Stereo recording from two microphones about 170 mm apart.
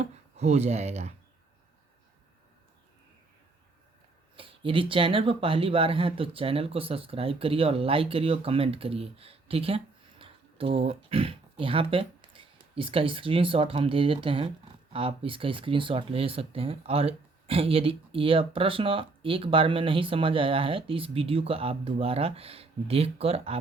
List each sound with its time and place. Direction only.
0.0 s speech: 40° right (ahead or behind)
4.4 s speech: 30° right (ahead or behind)